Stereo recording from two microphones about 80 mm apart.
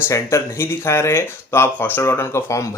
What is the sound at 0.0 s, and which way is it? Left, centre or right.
A man's voice, left.